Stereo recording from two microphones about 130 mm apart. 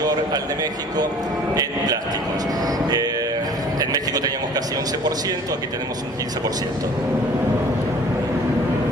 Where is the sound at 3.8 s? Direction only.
30° right (ahead or behind).